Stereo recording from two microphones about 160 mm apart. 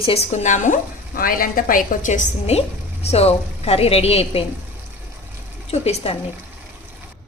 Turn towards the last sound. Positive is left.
turn(degrees=40)  # may be behind; listen again after turning